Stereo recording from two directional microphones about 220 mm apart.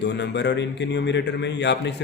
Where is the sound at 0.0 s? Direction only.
55° left (ahead or behind).